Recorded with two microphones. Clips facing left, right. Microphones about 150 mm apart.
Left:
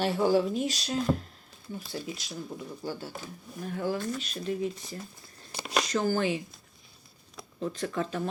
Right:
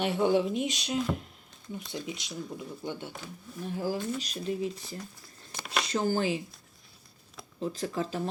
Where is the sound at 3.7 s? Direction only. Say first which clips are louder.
Left 1 dB; 30° right (ahead or behind).